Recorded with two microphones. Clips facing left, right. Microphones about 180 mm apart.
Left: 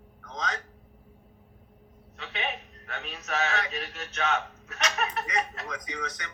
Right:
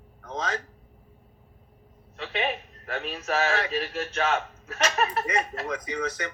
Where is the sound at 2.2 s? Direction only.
30° right (ahead or behind).